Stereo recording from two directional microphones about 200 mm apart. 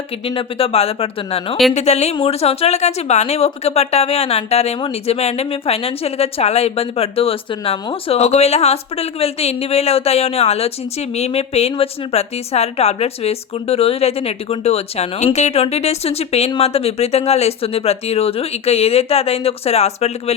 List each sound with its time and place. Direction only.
0.3 s a woman's voice: 30° left (ahead or behind)